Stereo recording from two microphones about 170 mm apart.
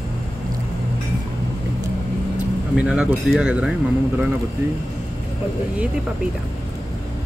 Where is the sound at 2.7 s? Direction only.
5° right (ahead or behind).